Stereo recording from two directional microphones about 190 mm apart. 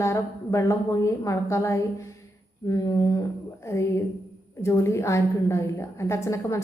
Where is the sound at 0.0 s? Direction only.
15° left (ahead or behind).